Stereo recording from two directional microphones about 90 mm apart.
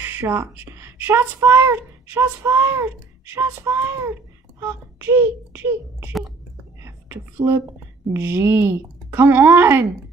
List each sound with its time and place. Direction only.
0.0 s a woman's voice: 25° right (ahead or behind)
6.8 s a sound: 30° right (ahead or behind)
8.1 s a woman's voice: 25° right (ahead or behind)